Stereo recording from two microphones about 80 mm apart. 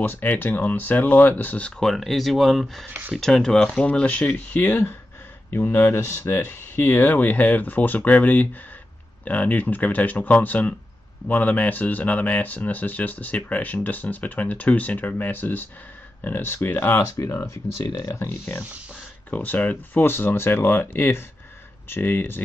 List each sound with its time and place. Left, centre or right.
0.0 s speech: left
1.8 s speech: centre
2.9 s speech: right
3.2 s speech: centre; by 22.4 s left